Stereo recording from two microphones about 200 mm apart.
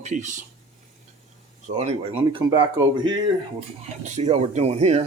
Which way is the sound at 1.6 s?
35° right (ahead or behind).